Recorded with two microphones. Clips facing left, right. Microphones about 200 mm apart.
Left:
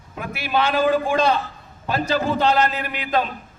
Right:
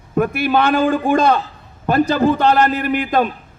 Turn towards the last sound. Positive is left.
turn(degrees=-50)  # may be behind; listen again after turning